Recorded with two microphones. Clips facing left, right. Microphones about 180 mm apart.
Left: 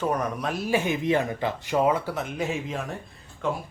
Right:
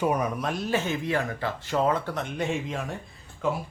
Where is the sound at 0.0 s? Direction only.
10° right (ahead or behind).